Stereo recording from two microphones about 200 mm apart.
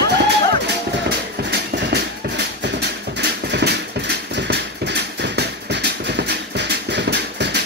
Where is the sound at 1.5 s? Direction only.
55° right (ahead or behind).